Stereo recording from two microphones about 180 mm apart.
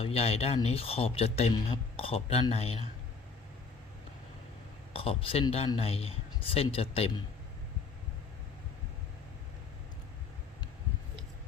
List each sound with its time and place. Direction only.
0.0 s speech: 35° left (ahead or behind)
4.9 s speech: 30° left (ahead or behind)